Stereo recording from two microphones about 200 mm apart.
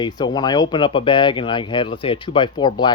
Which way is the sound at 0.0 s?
20° left (ahead or behind).